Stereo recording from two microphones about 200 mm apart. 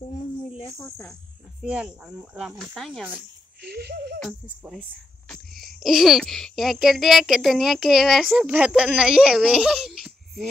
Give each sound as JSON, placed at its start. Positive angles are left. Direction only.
{"t": 0.7, "sound": "speech", "side_deg": 15}
{"t": 1.6, "sound": "a child's voice", "side_deg": -5}
{"t": 3.6, "sound": "a sound", "side_deg": -55}
{"t": 4.3, "sound": "a child's voice", "side_deg": -5}